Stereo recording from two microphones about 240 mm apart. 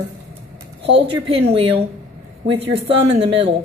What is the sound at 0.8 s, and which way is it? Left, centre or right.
Speech, right.